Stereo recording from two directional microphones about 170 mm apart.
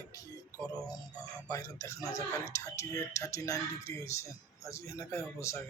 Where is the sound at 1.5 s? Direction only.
20° left (ahead or behind).